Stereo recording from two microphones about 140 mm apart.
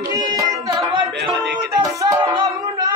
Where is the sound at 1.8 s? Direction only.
30° right (ahead or behind).